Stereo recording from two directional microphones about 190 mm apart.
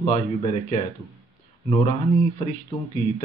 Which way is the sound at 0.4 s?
30° left (ahead or behind).